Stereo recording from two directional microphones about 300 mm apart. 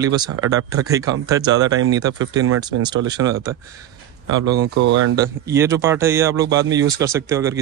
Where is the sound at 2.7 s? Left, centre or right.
Right.